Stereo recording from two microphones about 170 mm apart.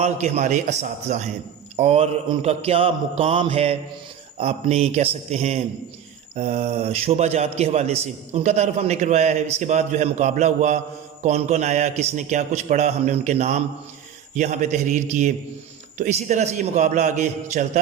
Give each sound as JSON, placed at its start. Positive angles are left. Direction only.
{"t": 0.0, "sound": "a man's voice", "side_deg": -40}